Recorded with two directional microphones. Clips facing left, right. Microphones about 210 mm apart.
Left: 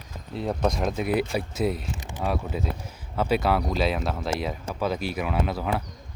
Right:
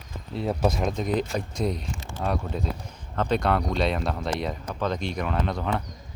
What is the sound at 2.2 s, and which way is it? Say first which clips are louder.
Speech: even; 5° left (ahead or behind).